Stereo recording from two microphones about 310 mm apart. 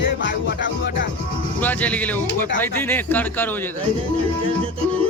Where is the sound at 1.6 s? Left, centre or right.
Centre.